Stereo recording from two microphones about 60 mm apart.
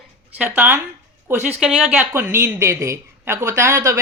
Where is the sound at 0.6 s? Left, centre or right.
Right.